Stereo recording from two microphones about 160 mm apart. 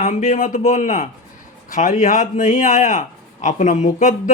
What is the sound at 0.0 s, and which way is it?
Speech, 50° left (ahead or behind).